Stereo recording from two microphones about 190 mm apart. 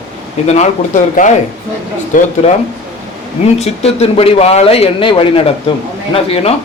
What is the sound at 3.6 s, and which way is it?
Speech, 35° left (ahead or behind).